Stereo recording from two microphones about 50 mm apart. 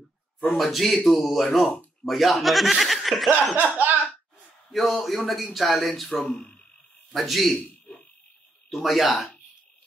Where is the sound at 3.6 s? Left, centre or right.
Right.